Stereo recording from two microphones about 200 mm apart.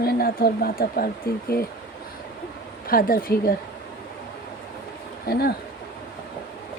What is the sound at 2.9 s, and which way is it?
Speech, 45° left (ahead or behind).